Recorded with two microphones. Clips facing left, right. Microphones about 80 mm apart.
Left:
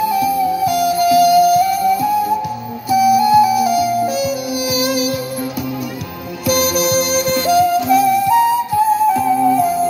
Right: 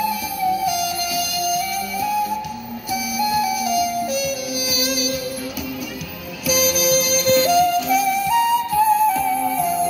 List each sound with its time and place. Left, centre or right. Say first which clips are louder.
0.7 s music: left 9 dB; left
6.7 s music: left 3 dB; left